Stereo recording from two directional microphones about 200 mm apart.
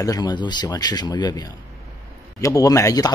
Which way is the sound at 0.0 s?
20° left (ahead or behind).